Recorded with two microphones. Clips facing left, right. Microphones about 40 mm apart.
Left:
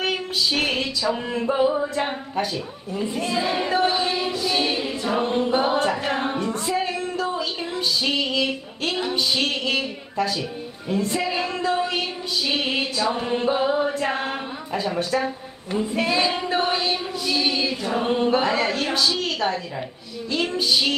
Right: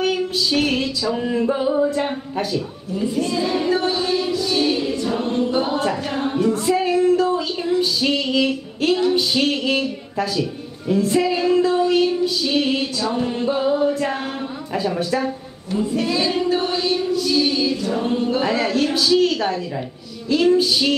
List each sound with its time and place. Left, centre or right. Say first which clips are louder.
0.0 s female singing: right 3 dB; centre
2.5 s speech: right 4 dB; centre
4.4 s choir: right 3 dB; centre
6.3 s a sound: right 6 dB; centre
7.8 s music: right 3 dB; centre
9.1 s speech: right 4 dB; centre
10.9 s female singing: right 6 dB; centre
14.7 s speech: right 2 dB; centre
15.9 s choir: right 1 dB; left
18.0 s choir: left 3 dB; left
18.4 s speech: right 3 dB; centre
20.2 s female singing: right 7 dB; centre